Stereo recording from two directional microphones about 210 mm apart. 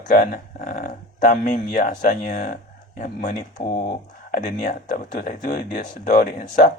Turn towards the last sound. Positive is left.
turn(degrees=35)  # may be behind; listen again after turning